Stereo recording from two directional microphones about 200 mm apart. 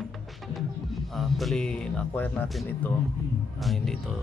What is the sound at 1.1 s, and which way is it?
Speech, centre (ahead or behind).